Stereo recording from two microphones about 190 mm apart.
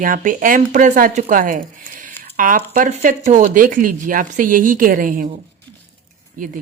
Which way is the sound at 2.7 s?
45° right (ahead or behind).